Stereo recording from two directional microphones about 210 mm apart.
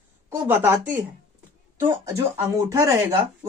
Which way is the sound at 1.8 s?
15° right (ahead or behind).